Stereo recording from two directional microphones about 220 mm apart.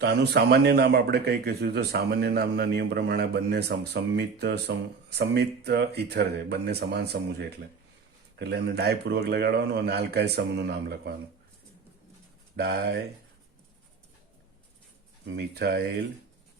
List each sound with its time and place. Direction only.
0.0 s a man's voice: 50° right (ahead or behind)
12.5 s a man's voice: 45° right (ahead or behind)
15.4 s a man's voice: 45° right (ahead or behind)